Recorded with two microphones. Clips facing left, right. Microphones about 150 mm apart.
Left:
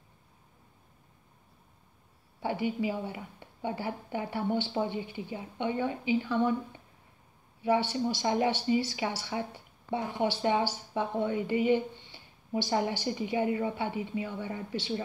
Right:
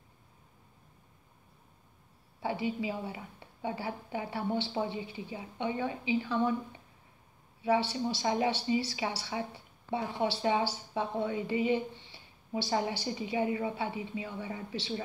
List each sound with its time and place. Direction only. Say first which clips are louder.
2.4 s speech: left 2 dB; 50° left (ahead or behind)
7.7 s speech: left 1 dB; 45° left (ahead or behind)